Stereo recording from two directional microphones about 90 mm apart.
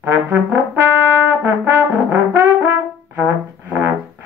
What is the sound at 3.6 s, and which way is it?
Music, 20° right (ahead or behind).